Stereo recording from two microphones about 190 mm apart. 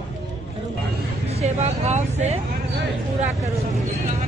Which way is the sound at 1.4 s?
35° right (ahead or behind).